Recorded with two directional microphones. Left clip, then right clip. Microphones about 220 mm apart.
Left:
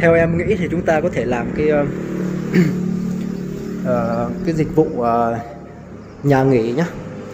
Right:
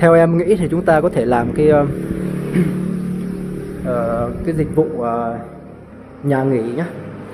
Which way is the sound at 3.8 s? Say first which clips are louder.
Right 1 dB; centre (ahead or behind).